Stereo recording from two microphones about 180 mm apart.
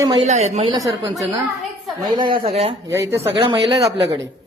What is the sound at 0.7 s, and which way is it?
Speech, 20° right (ahead or behind).